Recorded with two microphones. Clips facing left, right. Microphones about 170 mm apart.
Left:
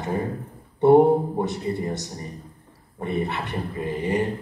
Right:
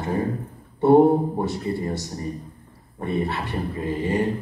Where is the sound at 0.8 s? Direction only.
20° left (ahead or behind).